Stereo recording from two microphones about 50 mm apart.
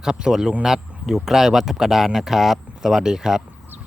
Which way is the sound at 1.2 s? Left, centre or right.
Centre.